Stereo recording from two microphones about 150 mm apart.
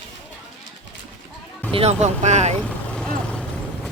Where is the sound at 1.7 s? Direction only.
45° right (ahead or behind).